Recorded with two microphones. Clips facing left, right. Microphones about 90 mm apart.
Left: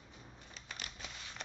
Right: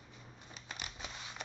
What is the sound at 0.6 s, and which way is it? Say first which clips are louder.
Scissors: right 2 dB; 15° right (ahead or behind).